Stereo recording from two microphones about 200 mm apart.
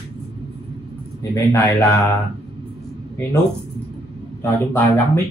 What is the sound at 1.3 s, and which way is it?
Mantra, 15° left (ahead or behind).